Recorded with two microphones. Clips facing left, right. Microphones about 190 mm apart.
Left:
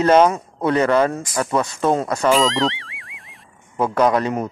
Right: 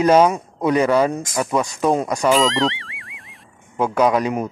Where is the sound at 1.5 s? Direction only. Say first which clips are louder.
Even; centre (ahead or behind).